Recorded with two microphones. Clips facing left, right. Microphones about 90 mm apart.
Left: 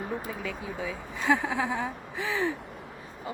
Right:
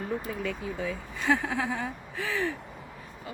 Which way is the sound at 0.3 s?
Centre (ahead or behind).